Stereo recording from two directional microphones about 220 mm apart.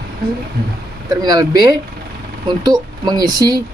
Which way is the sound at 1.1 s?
15° right (ahead or behind).